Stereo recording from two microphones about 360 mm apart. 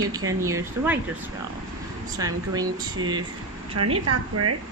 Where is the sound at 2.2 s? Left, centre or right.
Centre.